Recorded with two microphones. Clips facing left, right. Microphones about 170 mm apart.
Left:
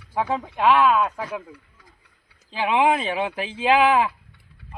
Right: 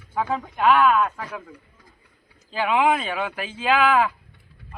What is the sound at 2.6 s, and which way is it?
Speech, 25° left (ahead or behind).